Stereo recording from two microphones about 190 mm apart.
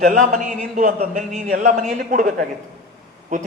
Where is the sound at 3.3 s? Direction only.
40° right (ahead or behind).